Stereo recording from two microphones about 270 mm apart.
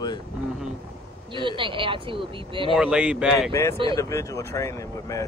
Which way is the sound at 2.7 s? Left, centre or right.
Centre.